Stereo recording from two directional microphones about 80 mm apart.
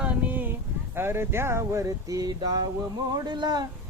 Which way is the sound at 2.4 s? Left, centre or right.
Right.